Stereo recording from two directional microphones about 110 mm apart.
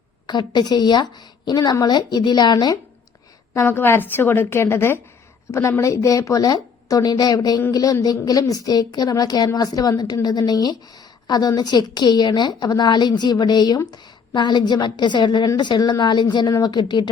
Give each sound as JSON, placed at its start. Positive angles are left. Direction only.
{"t": 0.3, "sound": "a woman's voice", "side_deg": 40}
{"t": 3.5, "sound": "a woman's voice", "side_deg": 20}